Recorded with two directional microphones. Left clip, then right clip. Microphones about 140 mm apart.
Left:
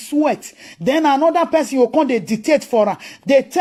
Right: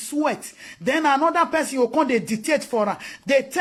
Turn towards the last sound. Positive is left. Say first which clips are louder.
# left 6 dB
turn(degrees=25)  # may be behind; listen again after turning